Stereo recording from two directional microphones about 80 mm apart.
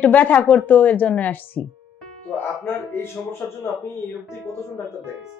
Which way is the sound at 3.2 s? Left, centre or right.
Centre.